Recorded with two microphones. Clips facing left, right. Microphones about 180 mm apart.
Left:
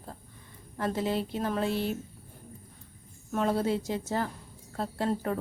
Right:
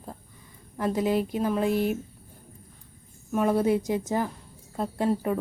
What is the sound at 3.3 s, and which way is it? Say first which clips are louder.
A woman's voice: right 5 dB; 15° right (ahead or behind).